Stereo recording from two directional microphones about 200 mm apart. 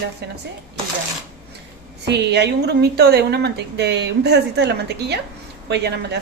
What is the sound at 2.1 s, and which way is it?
A woman's voice, 55° right (ahead or behind).